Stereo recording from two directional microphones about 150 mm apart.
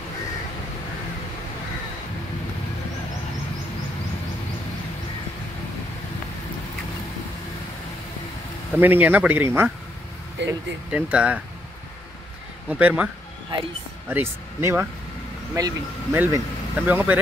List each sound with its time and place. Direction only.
8.7 s speech: 10° right (ahead or behind)
10.9 s speech: 10° right (ahead or behind)
12.6 s speech: 10° right (ahead or behind)